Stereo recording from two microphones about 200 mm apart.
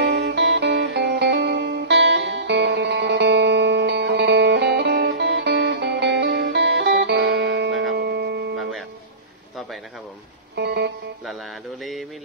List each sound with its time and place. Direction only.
0.0 s music: 60° right (ahead or behind)
10.5 s music: 55° right (ahead or behind)
11.8 s a sound: centre (ahead or behind)